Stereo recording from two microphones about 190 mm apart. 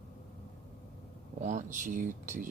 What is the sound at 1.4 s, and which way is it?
Speech, 40° right (ahead or behind).